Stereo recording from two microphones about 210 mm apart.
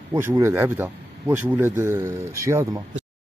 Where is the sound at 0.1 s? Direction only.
10° right (ahead or behind).